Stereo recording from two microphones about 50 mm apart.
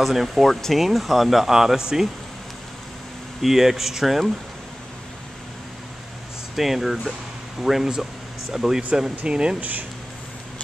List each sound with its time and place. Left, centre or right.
0.0 s speech: centre
3.4 s speech: centre
6.5 s speech: centre
9.1 s speech: right
9.6 s speech: right